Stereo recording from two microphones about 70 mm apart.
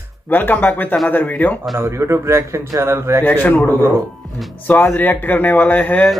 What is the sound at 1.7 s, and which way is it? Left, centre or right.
A man's voice, right.